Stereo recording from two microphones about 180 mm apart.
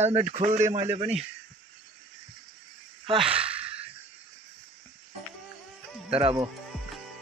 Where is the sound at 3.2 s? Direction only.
5° right (ahead or behind).